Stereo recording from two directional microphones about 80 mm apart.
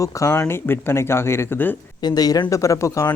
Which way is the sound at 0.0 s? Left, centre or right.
Left.